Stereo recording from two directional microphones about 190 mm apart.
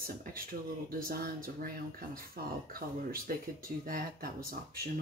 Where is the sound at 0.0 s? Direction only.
50° right (ahead or behind).